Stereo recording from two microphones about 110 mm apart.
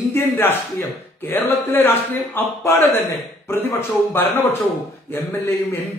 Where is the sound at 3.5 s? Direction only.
20° left (ahead or behind).